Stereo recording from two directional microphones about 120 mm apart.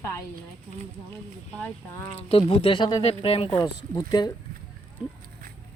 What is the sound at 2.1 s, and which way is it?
Speech, 50° left (ahead or behind).